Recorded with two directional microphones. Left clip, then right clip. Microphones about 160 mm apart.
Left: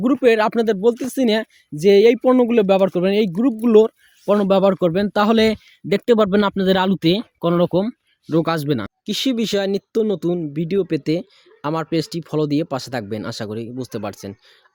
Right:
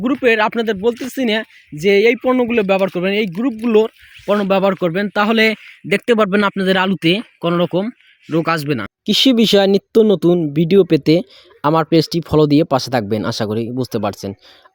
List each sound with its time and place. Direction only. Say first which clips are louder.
0.0 s speech: right 1 dB; 5° left (ahead or behind)
9.0 s speech: right 9 dB; 50° right (ahead or behind)